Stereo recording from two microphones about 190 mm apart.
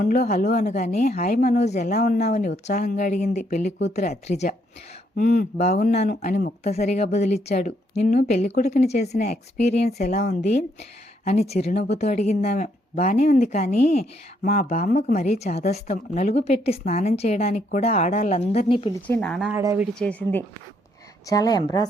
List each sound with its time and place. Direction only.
0.0 s speech: 40° left (ahead or behind)
0.4 s speech: 55° left (ahead or behind)
0.7 s speech: 40° left (ahead or behind)
5.7 s speech: 55° left (ahead or behind)
6.0 s speech: 40° left (ahead or behind)
6.7 s speech: 35° left (ahead or behind)
9.8 s speech: 55° left (ahead or behind)
11.5 s speech: 35° left (ahead or behind)
14.0 s speech: 55° left (ahead or behind)
14.6 s speech: 40° left (ahead or behind)
19.0 s speech: 5° left (ahead or behind)
19.5 s speech: 10° right (ahead or behind)
20.0 s speech: 5° left (ahead or behind)
21.2 s a woman's voice: 20° left (ahead or behind)